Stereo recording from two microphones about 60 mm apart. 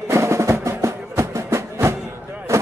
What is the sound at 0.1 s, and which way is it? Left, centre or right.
Music, right.